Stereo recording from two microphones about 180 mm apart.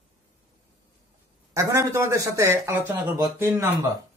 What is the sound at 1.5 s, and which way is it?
Speech, 15° right (ahead or behind).